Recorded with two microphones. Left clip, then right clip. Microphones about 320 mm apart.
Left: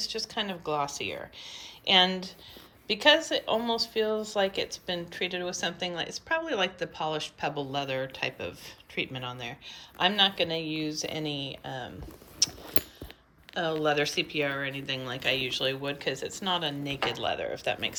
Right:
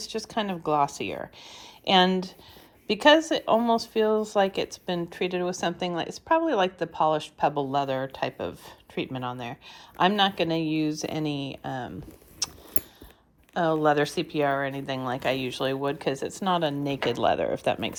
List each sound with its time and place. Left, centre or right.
0.0 s speech: centre
12.4 s a sound: centre
13.5 s speech: centre